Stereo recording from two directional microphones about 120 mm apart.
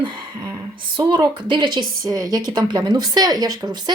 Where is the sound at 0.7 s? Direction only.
35° right (ahead or behind).